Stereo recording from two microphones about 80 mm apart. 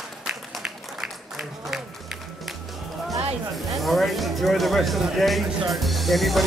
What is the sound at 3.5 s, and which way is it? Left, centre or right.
Speech, centre.